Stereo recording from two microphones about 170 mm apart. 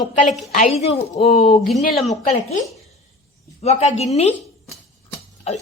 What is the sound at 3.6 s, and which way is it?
Speech, 40° left (ahead or behind).